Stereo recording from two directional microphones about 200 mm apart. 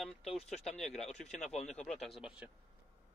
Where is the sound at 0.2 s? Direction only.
30° left (ahead or behind).